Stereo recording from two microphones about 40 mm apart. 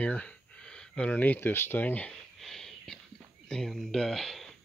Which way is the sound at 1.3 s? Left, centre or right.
Left.